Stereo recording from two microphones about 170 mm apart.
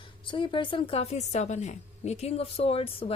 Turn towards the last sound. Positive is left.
turn(degrees=35)  # may be behind; listen again after turning